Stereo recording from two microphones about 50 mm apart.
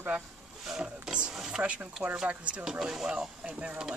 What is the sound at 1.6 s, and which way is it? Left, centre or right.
Speech, right.